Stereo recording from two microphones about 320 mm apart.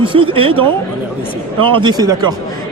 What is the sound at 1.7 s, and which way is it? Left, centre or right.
Speech, centre.